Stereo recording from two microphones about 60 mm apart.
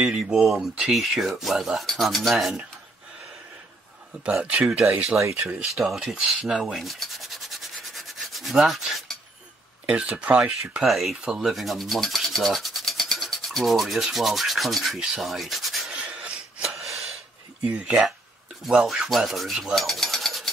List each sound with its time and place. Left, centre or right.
0.0 s speech: centre
0.4 s speech: centre
4.2 s speech: right
5.8 s speech: centre
6.6 s rub: centre
9.8 s speech: centre
10.9 s speech: centre
11.1 s rub: centre
15.9 s a sound: centre
16.7 s a sound: centre
17.6 s speech: centre
19.0 s a sound: centre